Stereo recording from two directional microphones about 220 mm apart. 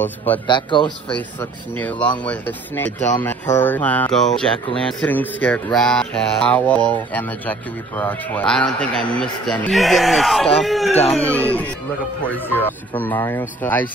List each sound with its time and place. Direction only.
0.0 s speech: 10° left (ahead or behind)
0.5 s speech: 20° left (ahead or behind)
1.1 s speech: 5° left (ahead or behind)
5.0 s mantra: 10° left (ahead or behind)
10.9 s speech: 30° left (ahead or behind)
11.1 s speech: 5° left (ahead or behind)